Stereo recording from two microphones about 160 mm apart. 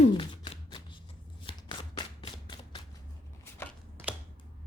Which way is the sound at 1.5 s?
30° left (ahead or behind).